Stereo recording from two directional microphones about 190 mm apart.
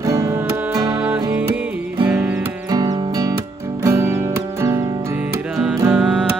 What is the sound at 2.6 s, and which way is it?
Music, 20° right (ahead or behind).